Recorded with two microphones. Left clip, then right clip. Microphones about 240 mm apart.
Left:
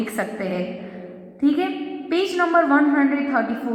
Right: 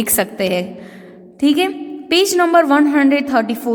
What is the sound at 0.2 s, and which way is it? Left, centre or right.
A woman's voice, right.